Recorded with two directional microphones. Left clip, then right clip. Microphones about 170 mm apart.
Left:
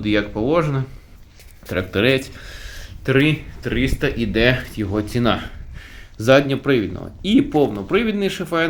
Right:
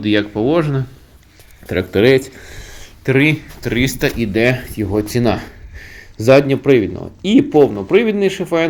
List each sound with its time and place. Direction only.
0.0 s speech: 15° right (ahead or behind)
3.6 s speech: 30° right (ahead or behind)
4.3 s speech: 10° right (ahead or behind)
6.5 s speech: 50° left (ahead or behind)
7.3 s speech: 5° left (ahead or behind)